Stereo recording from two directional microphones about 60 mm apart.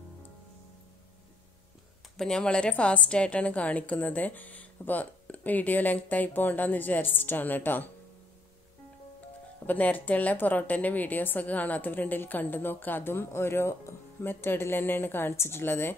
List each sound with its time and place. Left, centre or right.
2.1 s a woman's voice: centre; by 7.9 s left
9.7 s a woman's voice: left